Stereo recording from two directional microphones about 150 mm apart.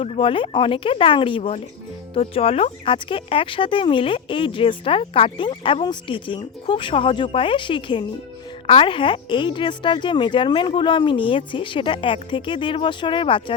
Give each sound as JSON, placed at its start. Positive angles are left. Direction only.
{"t": 0.0, "sound": "speech", "side_deg": 35}